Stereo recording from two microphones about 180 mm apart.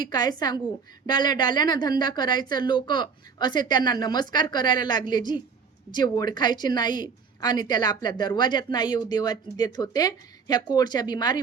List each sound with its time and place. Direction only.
0.0 s a woman's voice: 20° left (ahead or behind)